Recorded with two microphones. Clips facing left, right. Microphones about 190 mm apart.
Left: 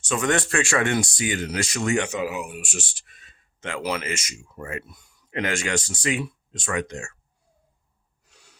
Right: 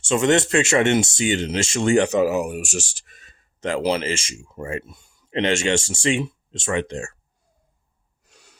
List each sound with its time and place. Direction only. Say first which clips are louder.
0.0 s speech: right 6 dB; 25° right (ahead or behind)